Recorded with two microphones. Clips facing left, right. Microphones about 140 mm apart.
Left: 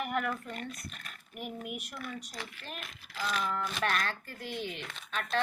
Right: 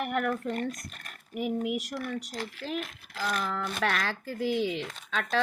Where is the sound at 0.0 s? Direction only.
60° right (ahead or behind).